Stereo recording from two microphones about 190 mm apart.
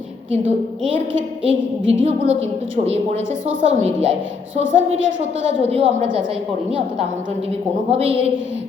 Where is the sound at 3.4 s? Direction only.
35° right (ahead or behind).